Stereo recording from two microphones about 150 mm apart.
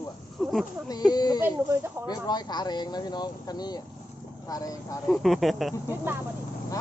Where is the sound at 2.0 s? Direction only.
25° left (ahead or behind).